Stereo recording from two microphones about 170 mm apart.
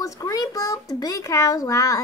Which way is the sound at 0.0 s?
20° left (ahead or behind).